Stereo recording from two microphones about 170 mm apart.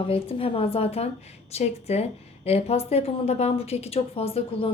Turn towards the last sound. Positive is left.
turn(degrees=35)  # may be behind; listen again after turning